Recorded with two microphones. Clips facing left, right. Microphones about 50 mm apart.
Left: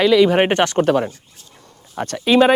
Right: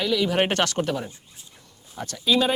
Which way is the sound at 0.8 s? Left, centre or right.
Left.